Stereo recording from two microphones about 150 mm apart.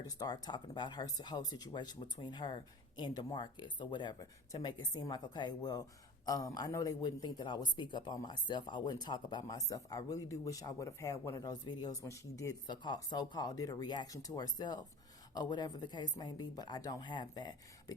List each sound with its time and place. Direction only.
0.2 s speech: 25° left (ahead or behind)